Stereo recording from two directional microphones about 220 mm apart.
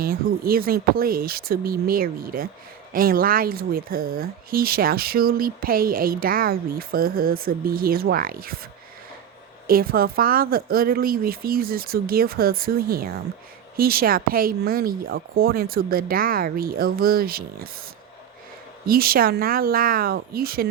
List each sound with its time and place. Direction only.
0.0 s speech: 40° right (ahead or behind)
9.6 s a woman's voice: 40° right (ahead or behind)
18.9 s a woman's voice: 40° right (ahead or behind)